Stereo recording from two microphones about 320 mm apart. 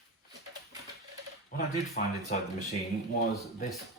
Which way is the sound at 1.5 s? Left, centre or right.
Left.